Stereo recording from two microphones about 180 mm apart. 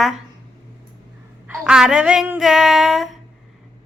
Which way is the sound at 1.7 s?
5° right (ahead or behind).